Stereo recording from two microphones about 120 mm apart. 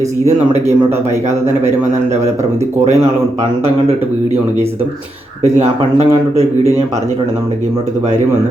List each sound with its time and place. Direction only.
5.4 s speech: 60° right (ahead or behind)